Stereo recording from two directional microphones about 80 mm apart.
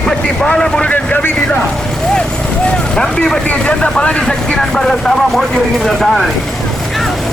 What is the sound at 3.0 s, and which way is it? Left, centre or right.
Speech, centre.